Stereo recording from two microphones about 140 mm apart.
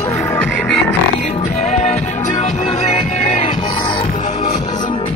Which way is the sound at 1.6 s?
55° left (ahead or behind).